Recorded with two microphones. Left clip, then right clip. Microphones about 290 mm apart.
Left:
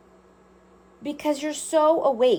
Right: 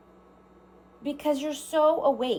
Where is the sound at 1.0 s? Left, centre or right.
Left.